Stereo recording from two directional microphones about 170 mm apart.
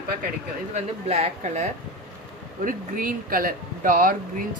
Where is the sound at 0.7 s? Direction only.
40° right (ahead or behind).